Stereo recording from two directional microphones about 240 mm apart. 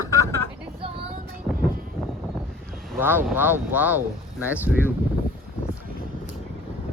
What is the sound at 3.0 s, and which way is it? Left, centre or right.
Speech, centre.